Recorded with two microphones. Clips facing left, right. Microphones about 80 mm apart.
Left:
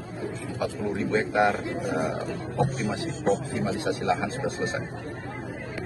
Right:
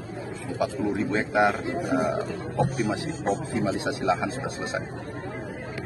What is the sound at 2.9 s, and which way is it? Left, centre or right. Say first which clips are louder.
A man's voice: left 1 dB; right.